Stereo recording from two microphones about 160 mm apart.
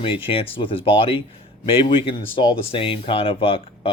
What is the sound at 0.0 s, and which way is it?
Speech, 35° left (ahead or behind).